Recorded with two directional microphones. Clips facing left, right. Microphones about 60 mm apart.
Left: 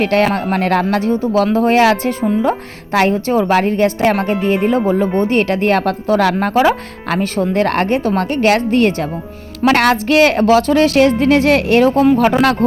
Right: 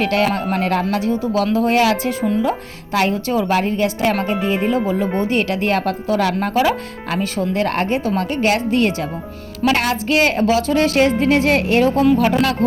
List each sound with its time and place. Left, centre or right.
0.0 s a woman's voice: left
0.5 s a woman's voice: left
6.5 s a woman's voice: left
9.7 s a woman's voice: left
12.1 s a woman's voice: left